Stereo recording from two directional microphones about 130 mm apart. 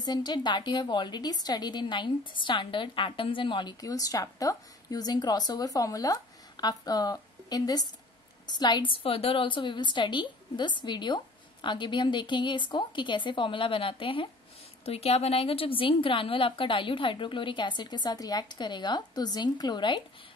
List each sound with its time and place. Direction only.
0.0 s a woman's voice: 35° left (ahead or behind)